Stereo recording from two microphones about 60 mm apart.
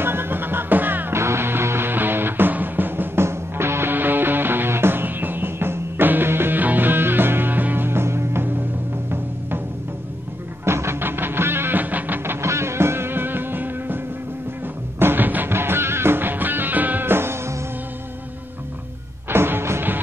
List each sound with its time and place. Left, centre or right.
0.0 s music: right
1.1 s music: right
3.3 s music: right
10.6 s music: right
12.4 s music: right
19.2 s music: right